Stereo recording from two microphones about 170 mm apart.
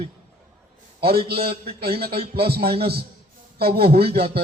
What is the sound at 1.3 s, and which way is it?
A man's voice, 65° right (ahead or behind).